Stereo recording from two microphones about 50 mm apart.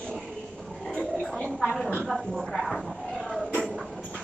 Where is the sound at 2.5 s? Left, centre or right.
Centre.